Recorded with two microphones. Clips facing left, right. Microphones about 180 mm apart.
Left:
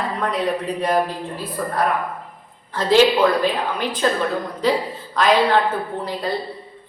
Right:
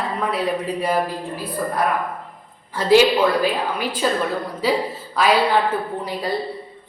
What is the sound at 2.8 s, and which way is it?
A woman's voice, 10° right (ahead or behind).